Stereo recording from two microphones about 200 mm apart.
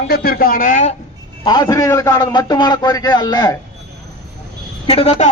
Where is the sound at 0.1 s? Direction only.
50° left (ahead or behind).